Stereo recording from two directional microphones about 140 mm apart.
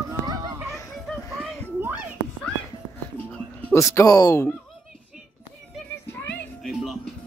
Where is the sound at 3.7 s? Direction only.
20° left (ahead or behind).